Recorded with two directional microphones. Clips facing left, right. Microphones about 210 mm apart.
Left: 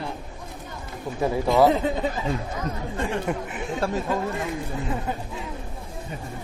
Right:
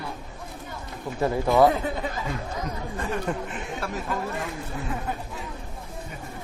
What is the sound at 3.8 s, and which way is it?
Speech, 25° left (ahead or behind).